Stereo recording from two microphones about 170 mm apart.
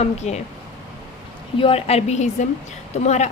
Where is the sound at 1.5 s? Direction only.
35° left (ahead or behind).